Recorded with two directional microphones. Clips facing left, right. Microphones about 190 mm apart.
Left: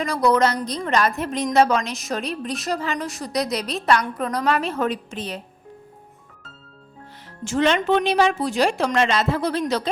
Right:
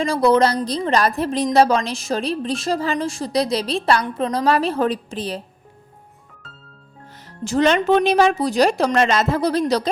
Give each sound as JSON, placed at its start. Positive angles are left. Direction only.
{"t": 0.0, "sound": "a woman's voice", "side_deg": -30}
{"t": 7.4, "sound": "a woman's voice", "side_deg": -40}